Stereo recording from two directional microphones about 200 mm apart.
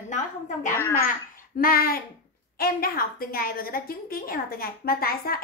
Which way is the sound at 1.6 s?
45° left (ahead or behind).